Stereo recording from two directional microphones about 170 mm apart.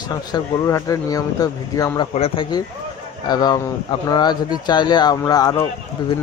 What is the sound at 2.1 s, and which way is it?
Speech, 35° left (ahead or behind).